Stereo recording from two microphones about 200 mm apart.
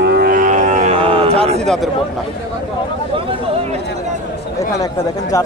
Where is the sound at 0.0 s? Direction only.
50° right (ahead or behind); by 1.6 s 30° right (ahead or behind).